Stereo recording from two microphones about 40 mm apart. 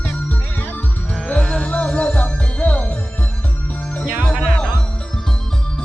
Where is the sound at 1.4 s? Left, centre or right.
Left.